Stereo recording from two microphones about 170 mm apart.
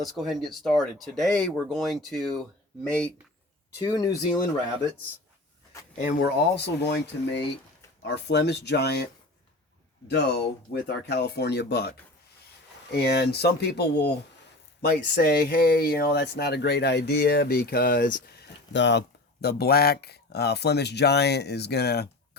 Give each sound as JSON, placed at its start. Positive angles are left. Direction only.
{"t": 0.0, "sound": "speech", "side_deg": 0}
{"t": 3.8, "sound": "speech", "side_deg": 20}
{"t": 6.0, "sound": "speech", "side_deg": 55}
{"t": 6.7, "sound": "speech", "side_deg": 80}
{"t": 10.1, "sound": "speech", "side_deg": 90}